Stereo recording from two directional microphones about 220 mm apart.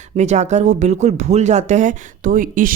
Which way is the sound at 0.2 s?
30° right (ahead or behind).